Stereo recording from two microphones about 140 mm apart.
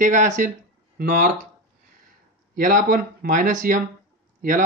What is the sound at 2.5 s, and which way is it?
Speech, 75° right (ahead or behind).